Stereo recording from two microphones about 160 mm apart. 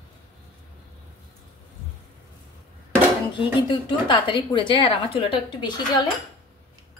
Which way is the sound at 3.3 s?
30° left (ahead or behind).